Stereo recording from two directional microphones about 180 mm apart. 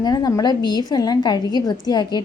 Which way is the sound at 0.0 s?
20° left (ahead or behind).